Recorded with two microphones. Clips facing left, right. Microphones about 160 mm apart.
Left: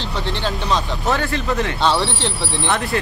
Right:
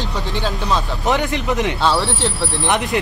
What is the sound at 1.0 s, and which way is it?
Speech, 20° right (ahead or behind).